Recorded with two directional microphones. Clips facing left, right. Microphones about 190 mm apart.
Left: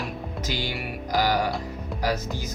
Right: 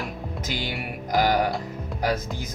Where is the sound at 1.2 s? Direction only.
55° right (ahead or behind).